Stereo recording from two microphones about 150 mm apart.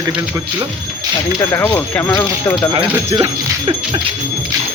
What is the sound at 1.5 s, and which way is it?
Speech, 15° left (ahead or behind).